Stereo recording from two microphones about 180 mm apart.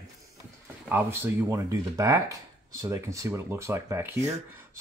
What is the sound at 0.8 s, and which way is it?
Speech, 10° right (ahead or behind).